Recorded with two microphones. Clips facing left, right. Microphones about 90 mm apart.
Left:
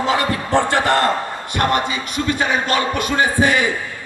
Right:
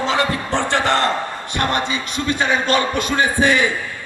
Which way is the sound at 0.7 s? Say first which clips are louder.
Left 1 dB; 25° right (ahead or behind).